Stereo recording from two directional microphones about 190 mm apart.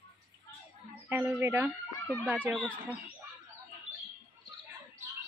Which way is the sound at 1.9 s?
10° left (ahead or behind).